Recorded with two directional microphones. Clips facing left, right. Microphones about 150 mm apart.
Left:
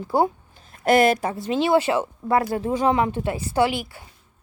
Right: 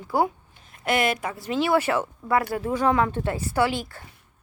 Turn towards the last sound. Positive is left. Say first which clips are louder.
# left 2 dB
turn(degrees=10)  # may be behind; listen again after turning